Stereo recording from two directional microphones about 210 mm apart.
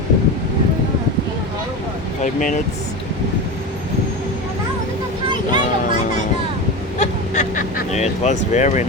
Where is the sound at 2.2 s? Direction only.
40° left (ahead or behind).